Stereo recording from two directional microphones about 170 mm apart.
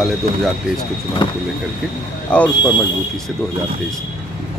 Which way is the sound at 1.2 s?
25° left (ahead or behind).